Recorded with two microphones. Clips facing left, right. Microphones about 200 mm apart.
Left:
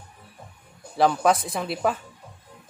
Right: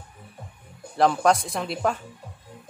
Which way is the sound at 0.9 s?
Centre (ahead or behind).